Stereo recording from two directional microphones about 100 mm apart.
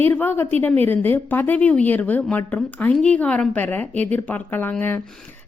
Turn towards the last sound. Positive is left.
turn(degrees=20)  # may be behind; listen again after turning